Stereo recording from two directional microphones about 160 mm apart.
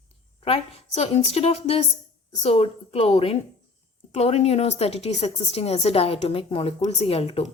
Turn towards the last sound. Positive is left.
turn(degrees=40)  # may be behind; listen again after turning